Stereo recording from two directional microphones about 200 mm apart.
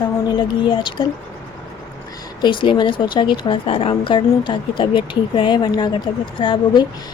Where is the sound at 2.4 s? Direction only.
25° left (ahead or behind).